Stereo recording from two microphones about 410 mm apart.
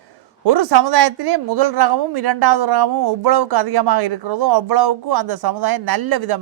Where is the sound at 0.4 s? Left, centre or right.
Right.